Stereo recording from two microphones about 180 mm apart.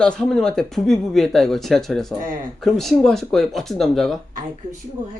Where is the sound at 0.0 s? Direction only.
5° left (ahead or behind).